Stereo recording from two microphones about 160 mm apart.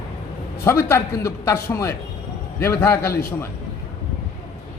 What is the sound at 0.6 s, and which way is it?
A man's voice, 15° left (ahead or behind).